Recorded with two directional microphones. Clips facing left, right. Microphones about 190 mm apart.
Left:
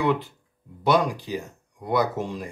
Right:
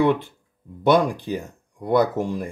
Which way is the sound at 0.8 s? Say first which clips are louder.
Right 4 dB; 55° right (ahead or behind).